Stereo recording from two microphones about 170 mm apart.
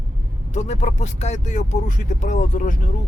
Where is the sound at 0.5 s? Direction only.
45° left (ahead or behind).